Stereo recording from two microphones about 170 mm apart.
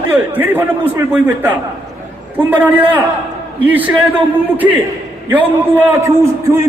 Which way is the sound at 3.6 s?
10° right (ahead or behind).